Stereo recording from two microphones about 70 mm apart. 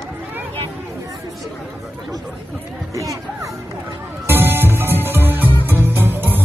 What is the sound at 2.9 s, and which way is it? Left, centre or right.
Music, right.